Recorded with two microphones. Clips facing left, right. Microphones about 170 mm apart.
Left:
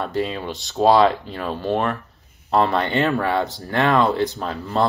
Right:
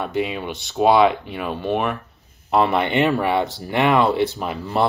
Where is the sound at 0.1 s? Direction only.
10° right (ahead or behind).